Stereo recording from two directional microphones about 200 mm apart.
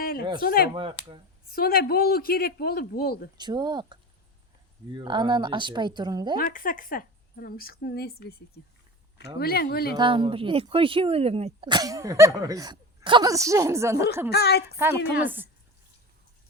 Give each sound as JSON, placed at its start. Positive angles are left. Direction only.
{"t": 0.0, "sound": "a sound", "side_deg": 50}
{"t": 0.4, "sound": "a woman's voice", "side_deg": 50}
{"t": 0.7, "sound": "speech", "side_deg": -25}
{"t": 1.5, "sound": "a woman's voice", "side_deg": 50}
{"t": 3.3, "sound": "speech", "side_deg": -20}
{"t": 4.9, "sound": "speech", "side_deg": -25}
{"t": 6.3, "sound": "a woman's voice", "side_deg": 45}
{"t": 10.0, "sound": "speech", "side_deg": -25}
{"t": 14.3, "sound": "a woman's voice", "side_deg": 55}
{"t": 15.2, "sound": "a woman's voice", "side_deg": -10}